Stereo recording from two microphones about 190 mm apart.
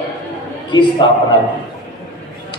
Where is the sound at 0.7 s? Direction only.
25° left (ahead or behind).